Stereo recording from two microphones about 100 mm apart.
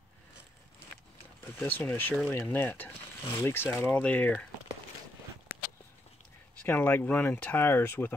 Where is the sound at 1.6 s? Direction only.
20° left (ahead or behind).